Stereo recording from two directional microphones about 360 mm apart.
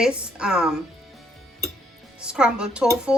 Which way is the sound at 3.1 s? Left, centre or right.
Centre.